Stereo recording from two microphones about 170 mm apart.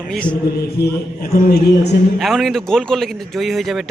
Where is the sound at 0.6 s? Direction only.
70° left (ahead or behind).